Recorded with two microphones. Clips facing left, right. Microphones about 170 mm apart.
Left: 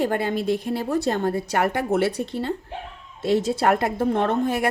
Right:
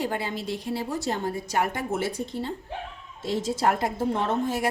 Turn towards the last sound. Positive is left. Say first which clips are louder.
# left 4 dB
turn(degrees=60)  # may be behind; listen again after turning